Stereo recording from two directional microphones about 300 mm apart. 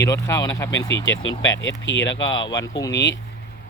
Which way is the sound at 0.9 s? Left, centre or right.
Left.